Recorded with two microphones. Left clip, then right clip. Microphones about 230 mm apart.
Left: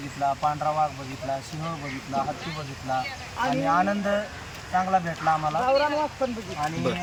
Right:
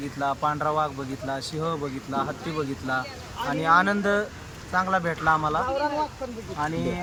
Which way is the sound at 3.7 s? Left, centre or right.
Centre.